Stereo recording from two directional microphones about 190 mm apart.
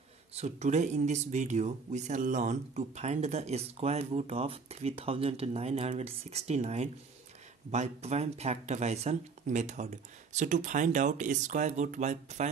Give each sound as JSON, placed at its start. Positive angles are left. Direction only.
{"t": 0.3, "sound": "speech", "side_deg": -35}